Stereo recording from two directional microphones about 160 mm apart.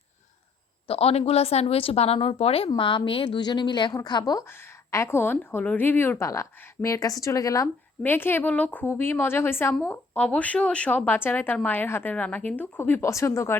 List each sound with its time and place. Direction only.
0.9 s a woman's voice: 40° left (ahead or behind); by 13.6 s 15° left (ahead or behind)